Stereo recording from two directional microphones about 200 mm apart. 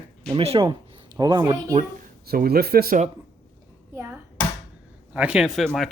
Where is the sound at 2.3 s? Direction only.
50° right (ahead or behind).